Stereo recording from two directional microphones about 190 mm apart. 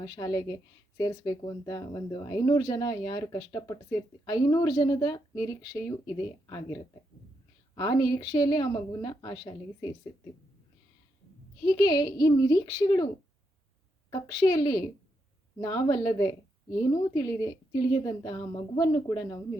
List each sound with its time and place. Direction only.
0.0 s speech: 20° left (ahead or behind)
7.8 s speech: 20° left (ahead or behind)
11.6 s speech: 20° left (ahead or behind)
14.1 s speech: 20° left (ahead or behind)